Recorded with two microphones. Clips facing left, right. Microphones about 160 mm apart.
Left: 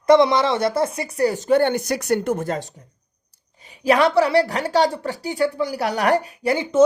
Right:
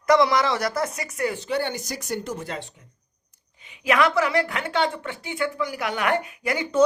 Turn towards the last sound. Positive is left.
turn(degrees=30)  # may be behind; listen again after turning